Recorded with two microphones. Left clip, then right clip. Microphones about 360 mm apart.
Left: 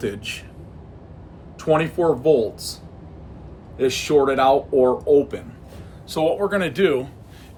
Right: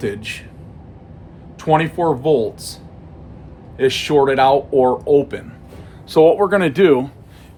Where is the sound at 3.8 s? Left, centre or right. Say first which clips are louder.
Right 3 dB; right.